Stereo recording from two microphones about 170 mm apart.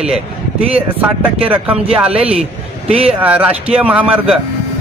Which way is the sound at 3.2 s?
10° right (ahead or behind).